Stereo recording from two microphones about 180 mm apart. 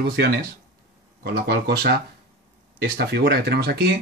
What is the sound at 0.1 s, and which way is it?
Speech, 60° right (ahead or behind).